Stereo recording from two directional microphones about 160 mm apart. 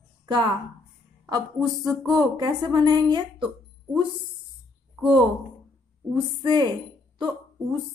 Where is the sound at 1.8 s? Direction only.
25° right (ahead or behind).